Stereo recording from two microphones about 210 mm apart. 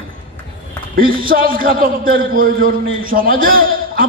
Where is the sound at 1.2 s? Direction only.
40° right (ahead or behind).